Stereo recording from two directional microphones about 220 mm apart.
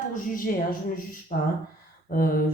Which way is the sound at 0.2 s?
40° left (ahead or behind).